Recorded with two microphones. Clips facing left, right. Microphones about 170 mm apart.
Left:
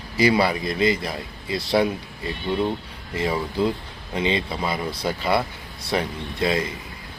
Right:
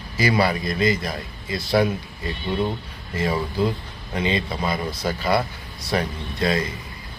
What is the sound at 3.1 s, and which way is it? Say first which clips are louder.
Mantra: even; 20° left (ahead or behind).